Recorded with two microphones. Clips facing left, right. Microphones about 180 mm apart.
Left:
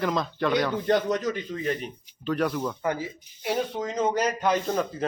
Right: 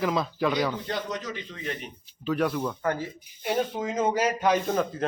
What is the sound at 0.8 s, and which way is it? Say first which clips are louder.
A man's voice: left 8 dB; 50° left (ahead or behind).